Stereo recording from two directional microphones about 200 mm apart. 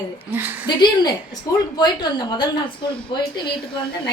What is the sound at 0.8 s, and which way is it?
A woman's voice, 20° left (ahead or behind).